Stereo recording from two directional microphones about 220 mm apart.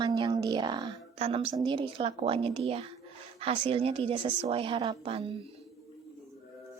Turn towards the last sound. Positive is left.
turn(degrees=-25)  # may be behind; listen again after turning